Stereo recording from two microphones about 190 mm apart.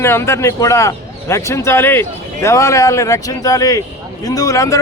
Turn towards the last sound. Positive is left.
turn(degrees=15)  # may be behind; listen again after turning